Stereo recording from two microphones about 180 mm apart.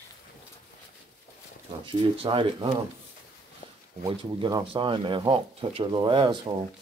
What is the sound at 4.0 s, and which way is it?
Speech, 25° right (ahead or behind).